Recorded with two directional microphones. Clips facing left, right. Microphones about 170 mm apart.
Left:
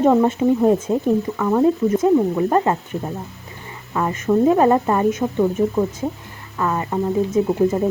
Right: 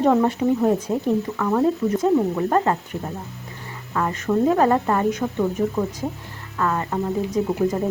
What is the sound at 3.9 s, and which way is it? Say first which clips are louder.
Speech: left 3 dB; 20° left (ahead or behind).